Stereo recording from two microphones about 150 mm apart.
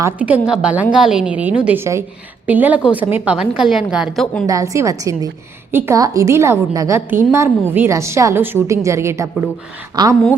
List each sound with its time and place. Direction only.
0.2 s a woman's voice: 10° right (ahead or behind)
4.4 s a woman's voice: 20° right (ahead or behind)